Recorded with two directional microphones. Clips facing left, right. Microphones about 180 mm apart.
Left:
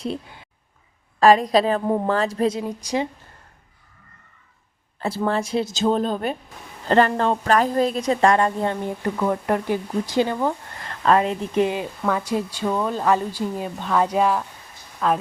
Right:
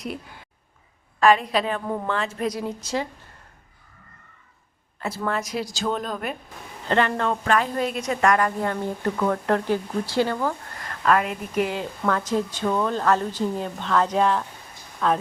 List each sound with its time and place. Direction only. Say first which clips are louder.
0.0 s speech: left 4 dB; 25° left (ahead or behind)
1.2 s speech: left 4 dB; 35° left (ahead or behind)
2.6 s speech: left 3 dB; 15° left (ahead or behind)
4.9 s speech: left 4 dB; 30° left (ahead or behind); by 15.2 s centre (ahead or behind)